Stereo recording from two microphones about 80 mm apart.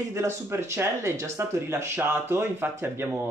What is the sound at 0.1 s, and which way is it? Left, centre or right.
Speech, right.